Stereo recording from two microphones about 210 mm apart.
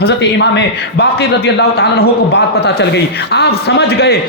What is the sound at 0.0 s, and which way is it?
A man's voice, 55° left (ahead or behind).